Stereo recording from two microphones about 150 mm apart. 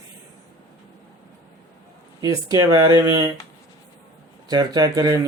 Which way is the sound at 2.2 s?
25° right (ahead or behind).